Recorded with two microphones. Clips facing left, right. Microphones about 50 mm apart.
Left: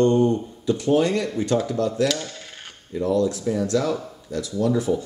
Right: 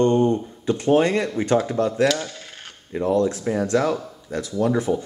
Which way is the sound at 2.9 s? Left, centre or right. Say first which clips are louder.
Right 1 dB; right.